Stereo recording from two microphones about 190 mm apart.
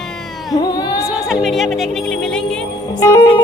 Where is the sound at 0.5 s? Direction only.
20° left (ahead or behind).